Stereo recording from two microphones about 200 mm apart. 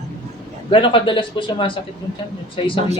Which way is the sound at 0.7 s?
25° left (ahead or behind).